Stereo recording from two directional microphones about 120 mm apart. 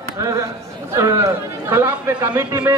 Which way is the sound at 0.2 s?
25° right (ahead or behind).